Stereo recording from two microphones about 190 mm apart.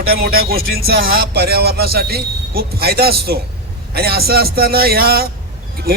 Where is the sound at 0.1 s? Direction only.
50° right (ahead or behind).